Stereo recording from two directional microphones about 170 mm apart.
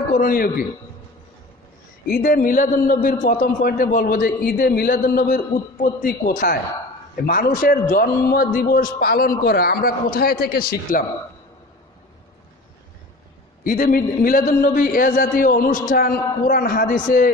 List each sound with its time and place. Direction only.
0.2 s a man's voice: 60° left (ahead or behind)
2.0 s a man's voice: 55° left (ahead or behind)
13.7 s a man's voice: 55° left (ahead or behind)